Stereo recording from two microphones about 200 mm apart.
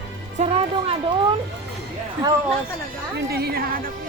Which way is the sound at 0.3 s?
30° right (ahead or behind).